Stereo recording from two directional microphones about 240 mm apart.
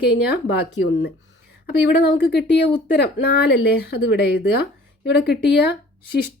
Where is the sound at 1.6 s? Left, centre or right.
Left.